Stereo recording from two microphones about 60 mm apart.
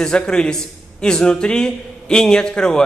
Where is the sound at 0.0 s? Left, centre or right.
Centre.